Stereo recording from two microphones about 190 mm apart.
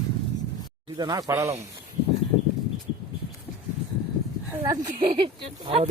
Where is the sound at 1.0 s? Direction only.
20° right (ahead or behind).